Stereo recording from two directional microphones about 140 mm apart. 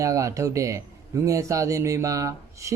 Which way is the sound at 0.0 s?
25° right (ahead or behind).